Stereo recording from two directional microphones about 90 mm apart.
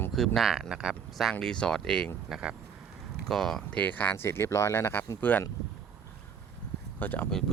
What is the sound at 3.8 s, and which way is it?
Speech, 20° left (ahead or behind).